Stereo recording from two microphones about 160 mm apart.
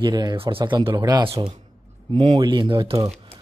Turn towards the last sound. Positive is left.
turn(degrees=-30)  # may be behind; listen again after turning